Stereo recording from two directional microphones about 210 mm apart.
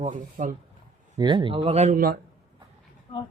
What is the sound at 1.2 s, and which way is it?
Speech, 20° right (ahead or behind).